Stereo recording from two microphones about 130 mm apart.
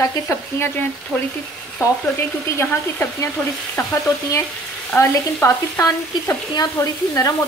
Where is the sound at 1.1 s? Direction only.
5° left (ahead or behind).